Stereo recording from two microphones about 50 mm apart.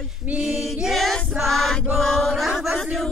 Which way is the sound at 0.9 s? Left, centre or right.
Centre.